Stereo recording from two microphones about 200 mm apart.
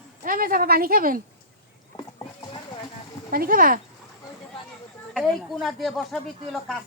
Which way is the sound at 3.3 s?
45° right (ahead or behind).